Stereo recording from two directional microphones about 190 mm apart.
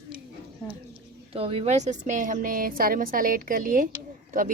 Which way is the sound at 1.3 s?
30° right (ahead or behind).